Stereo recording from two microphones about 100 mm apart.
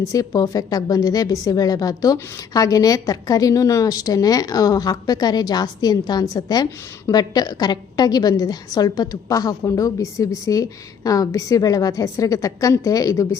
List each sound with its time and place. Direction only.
0.0 s a woman's voice: 35° left (ahead or behind)